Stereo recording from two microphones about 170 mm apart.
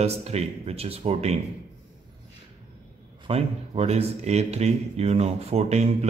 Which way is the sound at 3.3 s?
35° right (ahead or behind).